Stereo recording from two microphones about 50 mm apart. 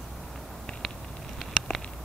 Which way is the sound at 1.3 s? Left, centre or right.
Centre.